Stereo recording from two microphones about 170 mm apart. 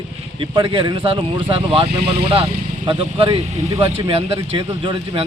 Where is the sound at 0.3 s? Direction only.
30° right (ahead or behind).